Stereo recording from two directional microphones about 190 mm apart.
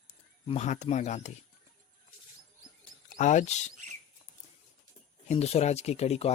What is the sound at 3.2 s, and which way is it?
Speech, 40° left (ahead or behind).